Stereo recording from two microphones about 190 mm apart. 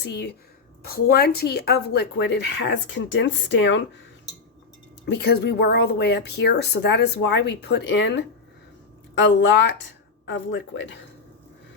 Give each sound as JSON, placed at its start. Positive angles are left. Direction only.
{"t": 0.0, "sound": "speech", "side_deg": 60}
{"t": 5.0, "sound": "speech", "side_deg": 60}